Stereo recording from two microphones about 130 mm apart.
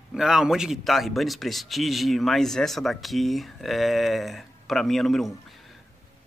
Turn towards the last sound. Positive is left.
turn(degrees=0)  # may be behind; listen again after turning